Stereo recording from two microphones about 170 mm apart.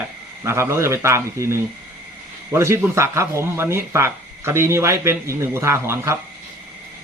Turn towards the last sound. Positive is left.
turn(degrees=-15)  # may be behind; listen again after turning